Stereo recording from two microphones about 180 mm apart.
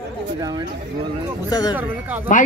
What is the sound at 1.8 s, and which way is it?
Speech, 10° right (ahead or behind).